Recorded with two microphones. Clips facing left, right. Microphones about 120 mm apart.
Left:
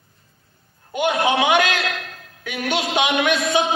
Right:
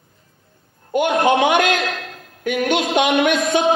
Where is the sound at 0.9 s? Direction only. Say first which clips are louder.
Right 3 dB; 45° right (ahead or behind).